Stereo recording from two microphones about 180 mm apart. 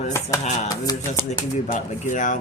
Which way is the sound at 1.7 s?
45° left (ahead or behind).